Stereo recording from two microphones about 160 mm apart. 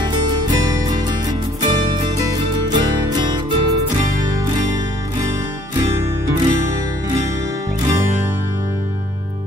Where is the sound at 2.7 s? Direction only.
25° right (ahead or behind).